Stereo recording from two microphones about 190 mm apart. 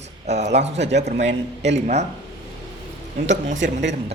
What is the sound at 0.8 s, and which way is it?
Speech, 65° right (ahead or behind).